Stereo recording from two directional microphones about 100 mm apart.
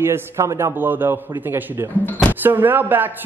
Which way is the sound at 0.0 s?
30° right (ahead or behind).